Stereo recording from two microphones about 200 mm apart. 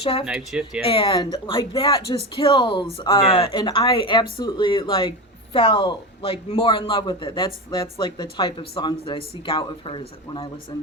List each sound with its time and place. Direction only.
0.0 s a man's voice: 30° left (ahead or behind)
0.3 s speech: centre (ahead or behind)
0.8 s a man's voice: 25° left (ahead or behind)